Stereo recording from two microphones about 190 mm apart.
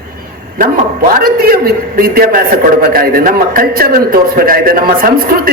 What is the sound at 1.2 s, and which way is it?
A man's voice, 50° right (ahead or behind).